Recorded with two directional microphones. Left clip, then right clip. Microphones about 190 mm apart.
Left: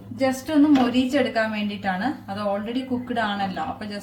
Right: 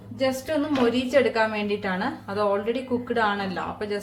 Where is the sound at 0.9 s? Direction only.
45° right (ahead or behind).